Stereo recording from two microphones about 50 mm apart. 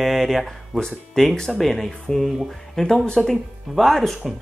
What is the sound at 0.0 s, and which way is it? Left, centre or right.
Speech, centre.